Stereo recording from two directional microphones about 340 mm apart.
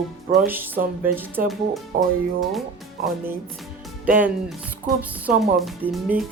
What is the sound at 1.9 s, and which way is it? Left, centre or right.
Speech, right.